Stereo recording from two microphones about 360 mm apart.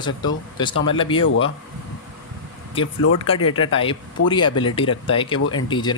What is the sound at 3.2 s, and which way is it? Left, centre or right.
Speech, centre.